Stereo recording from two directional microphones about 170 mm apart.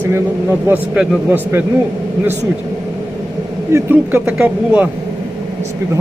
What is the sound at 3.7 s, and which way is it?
A man's voice, 15° right (ahead or behind).